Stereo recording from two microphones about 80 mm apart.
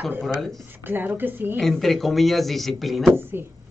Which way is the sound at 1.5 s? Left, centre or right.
Centre.